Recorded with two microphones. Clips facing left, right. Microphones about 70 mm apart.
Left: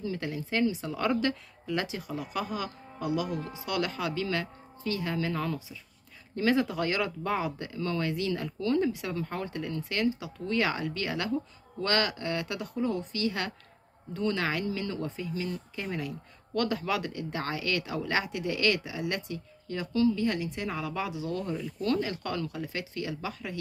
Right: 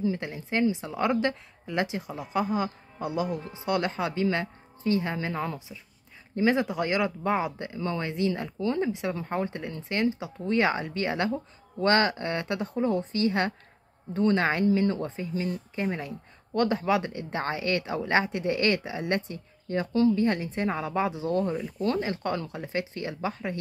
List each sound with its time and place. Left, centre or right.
0.0 s speech: right